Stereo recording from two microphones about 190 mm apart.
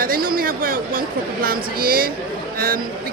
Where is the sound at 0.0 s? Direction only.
50° right (ahead or behind).